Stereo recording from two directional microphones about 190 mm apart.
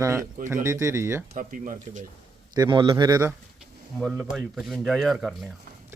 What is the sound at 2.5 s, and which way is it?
Speech, 25° right (ahead or behind).